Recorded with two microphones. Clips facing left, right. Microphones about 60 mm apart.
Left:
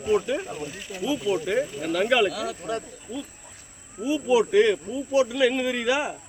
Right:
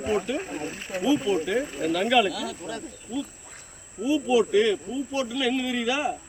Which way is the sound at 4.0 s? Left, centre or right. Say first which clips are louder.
Even; centre.